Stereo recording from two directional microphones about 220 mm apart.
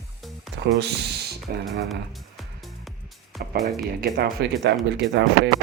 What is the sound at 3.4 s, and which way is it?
Music, 40° right (ahead or behind).